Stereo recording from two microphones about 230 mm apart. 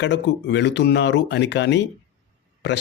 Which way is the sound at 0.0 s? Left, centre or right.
Left.